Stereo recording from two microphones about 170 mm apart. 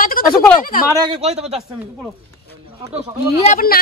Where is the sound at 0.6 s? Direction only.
55° left (ahead or behind).